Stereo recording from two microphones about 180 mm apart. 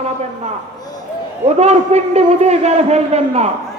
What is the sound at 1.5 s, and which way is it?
A man's voice, 35° right (ahead or behind).